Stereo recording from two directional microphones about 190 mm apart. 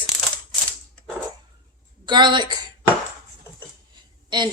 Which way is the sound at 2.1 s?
25° right (ahead or behind).